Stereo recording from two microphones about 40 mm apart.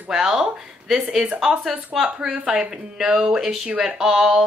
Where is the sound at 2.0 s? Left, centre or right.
Centre.